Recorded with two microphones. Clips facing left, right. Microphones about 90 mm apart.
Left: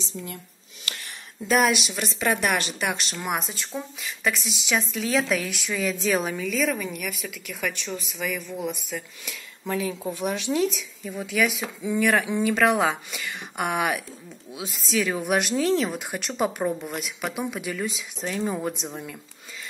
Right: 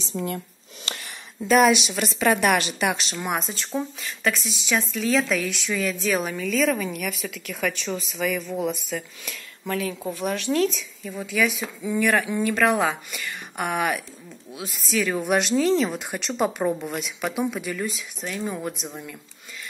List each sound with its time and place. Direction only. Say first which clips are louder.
0.1 s speech: right 11 dB; 50° right (ahead or behind)
0.9 s a sound: right 2 dB; 25° right (ahead or behind)
1.5 s speech: right 4 dB; centre (ahead or behind)
6.0 s speech: left 1 dB; 25° left (ahead or behind)
6.3 s speech: right 3 dB; 5° left (ahead or behind)
9.7 s speech: even; 20° left (ahead or behind)
18.2 s speech: left 2 dB; 20° left (ahead or behind)